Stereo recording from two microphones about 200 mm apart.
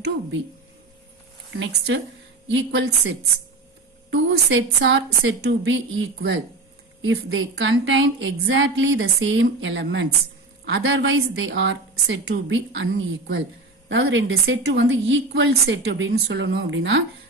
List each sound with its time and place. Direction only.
2.4 s speech: 65° right (ahead or behind)
7.0 s a woman's voice: 90° right; by 17.0 s 70° right (ahead or behind)